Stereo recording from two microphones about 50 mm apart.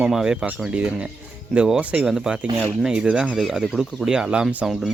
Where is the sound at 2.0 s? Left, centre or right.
Centre.